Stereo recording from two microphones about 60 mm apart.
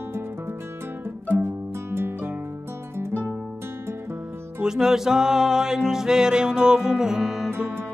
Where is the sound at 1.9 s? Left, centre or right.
Right.